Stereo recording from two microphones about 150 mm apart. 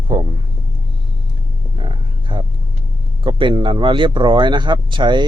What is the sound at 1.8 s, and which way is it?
Roaring cats, 35° right (ahead or behind).